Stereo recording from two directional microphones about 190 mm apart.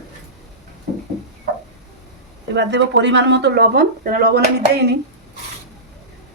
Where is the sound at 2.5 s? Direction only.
70° right (ahead or behind).